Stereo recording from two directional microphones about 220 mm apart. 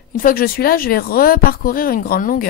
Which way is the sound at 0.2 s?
40° left (ahead or behind).